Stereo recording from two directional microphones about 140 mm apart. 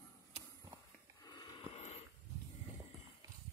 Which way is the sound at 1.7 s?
55° left (ahead or behind).